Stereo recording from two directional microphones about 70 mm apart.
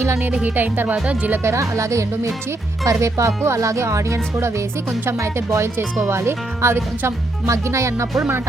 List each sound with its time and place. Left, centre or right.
0.0 s speech: right
0.4 s speech: right
1.5 s speech: right